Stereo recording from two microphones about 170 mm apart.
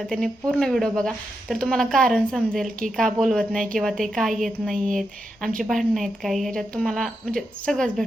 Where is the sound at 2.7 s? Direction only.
50° right (ahead or behind).